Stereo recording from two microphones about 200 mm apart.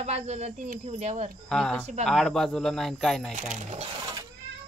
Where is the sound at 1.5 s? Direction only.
5° left (ahead or behind).